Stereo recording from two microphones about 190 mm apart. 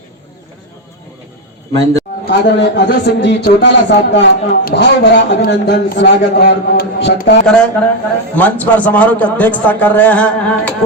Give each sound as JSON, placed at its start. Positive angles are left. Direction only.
{"t": 2.2, "sound": "a man's voice", "side_deg": 65}
{"t": 7.4, "sound": "a man's voice", "side_deg": 5}